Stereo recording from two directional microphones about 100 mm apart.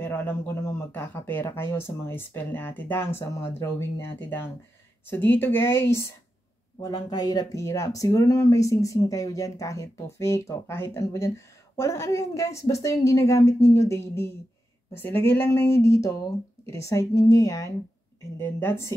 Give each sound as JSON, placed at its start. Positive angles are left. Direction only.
{"t": 0.0, "sound": "speech", "side_deg": 20}
{"t": 6.8, "sound": "speech", "side_deg": 40}